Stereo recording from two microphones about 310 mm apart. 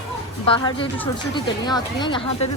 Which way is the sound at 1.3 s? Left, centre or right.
Centre.